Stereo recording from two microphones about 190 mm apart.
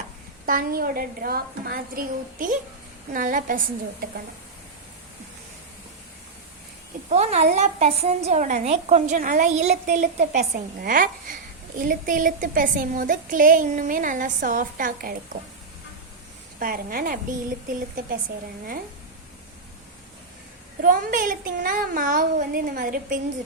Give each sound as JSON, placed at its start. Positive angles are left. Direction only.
{"t": 0.4, "sound": "a woman's voice", "side_deg": -50}
{"t": 7.1, "sound": "a woman's voice", "side_deg": -35}
{"t": 16.6, "sound": "a woman's voice", "side_deg": -50}
{"t": 20.8, "sound": "a woman's voice", "side_deg": -45}